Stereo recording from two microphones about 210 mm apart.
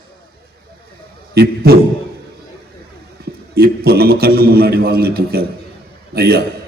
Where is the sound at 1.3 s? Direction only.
50° right (ahead or behind).